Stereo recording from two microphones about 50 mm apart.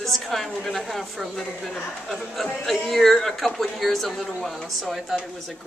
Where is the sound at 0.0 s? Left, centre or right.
Centre.